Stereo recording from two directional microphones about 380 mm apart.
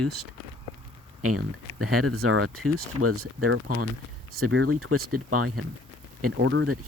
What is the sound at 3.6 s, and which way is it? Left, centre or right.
Speech, right.